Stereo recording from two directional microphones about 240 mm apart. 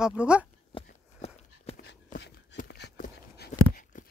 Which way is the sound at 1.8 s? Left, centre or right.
Left.